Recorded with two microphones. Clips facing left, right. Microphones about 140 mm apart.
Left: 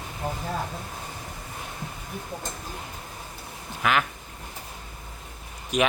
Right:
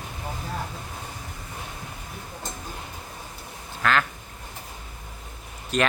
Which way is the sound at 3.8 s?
10° left (ahead or behind).